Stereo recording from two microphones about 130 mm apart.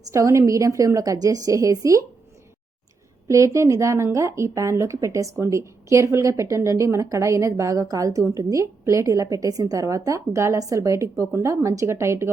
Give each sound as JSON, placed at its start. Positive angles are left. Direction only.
{"t": 0.1, "sound": "speech", "side_deg": -25}
{"t": 3.2, "sound": "speech", "side_deg": -25}